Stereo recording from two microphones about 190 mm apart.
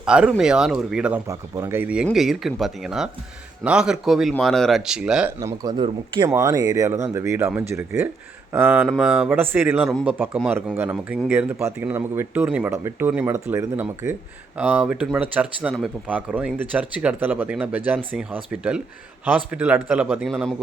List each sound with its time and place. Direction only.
0.0 s speech: 5° right (ahead or behind)
5.4 s speech: 20° right (ahead or behind); by 20.4 s 5° right (ahead or behind)